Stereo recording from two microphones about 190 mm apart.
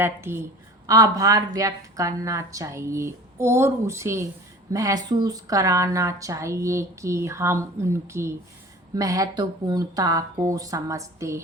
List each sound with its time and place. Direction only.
0.0 s speech: 15° right (ahead or behind)